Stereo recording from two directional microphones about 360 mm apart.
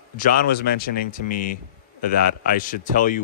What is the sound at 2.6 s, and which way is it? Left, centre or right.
Speech, left.